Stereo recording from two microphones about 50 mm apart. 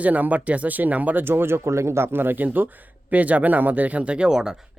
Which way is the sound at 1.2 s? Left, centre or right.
Right.